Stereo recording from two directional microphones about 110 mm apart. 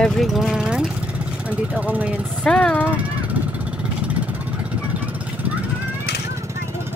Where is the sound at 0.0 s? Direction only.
Centre (ahead or behind).